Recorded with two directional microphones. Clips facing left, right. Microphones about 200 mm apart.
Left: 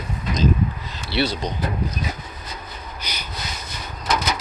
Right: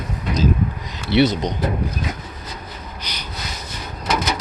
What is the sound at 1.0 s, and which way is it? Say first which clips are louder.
Speech: right 7 dB; 20° right (ahead or behind).